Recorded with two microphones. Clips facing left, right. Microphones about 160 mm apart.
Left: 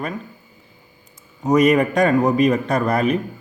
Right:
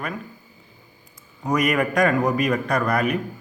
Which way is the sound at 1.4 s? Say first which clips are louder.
Left 6 dB; 25° left (ahead or behind).